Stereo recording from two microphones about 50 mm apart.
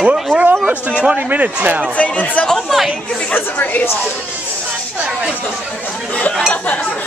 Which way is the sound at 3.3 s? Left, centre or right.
Left.